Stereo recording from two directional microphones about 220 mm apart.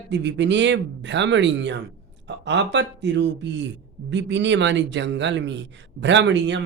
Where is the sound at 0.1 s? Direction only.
55° right (ahead or behind).